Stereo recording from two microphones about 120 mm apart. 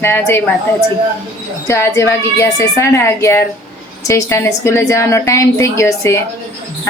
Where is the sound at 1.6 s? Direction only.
25° left (ahead or behind).